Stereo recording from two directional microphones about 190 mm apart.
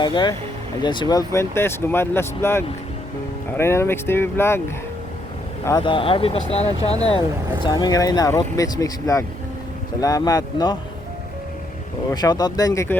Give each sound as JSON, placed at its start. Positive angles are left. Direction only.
{"t": 0.0, "sound": "speech", "side_deg": 25}
{"t": 5.6, "sound": "speech", "side_deg": 25}
{"t": 7.6, "sound": "speech", "side_deg": 20}
{"t": 12.1, "sound": "speech", "side_deg": 20}